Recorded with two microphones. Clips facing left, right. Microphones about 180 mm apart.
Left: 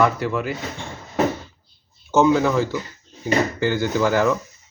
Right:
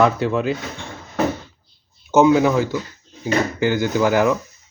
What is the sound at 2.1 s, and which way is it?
Speech, 15° right (ahead or behind).